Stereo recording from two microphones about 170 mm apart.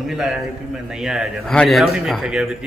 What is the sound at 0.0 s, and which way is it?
Speech, 5° right (ahead or behind).